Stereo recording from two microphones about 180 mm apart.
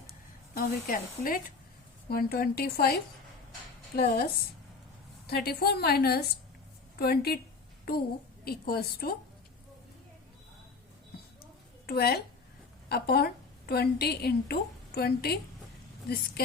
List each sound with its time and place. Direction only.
0.5 s a woman's voice: 50° left (ahead or behind)
8.4 s a woman's voice: 60° left (ahead or behind)
11.9 s a woman's voice: 60° left (ahead or behind)